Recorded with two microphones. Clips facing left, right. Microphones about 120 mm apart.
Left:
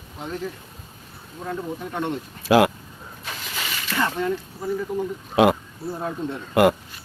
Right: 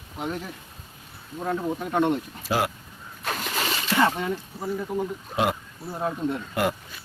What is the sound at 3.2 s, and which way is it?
Splash, 55° right (ahead or behind).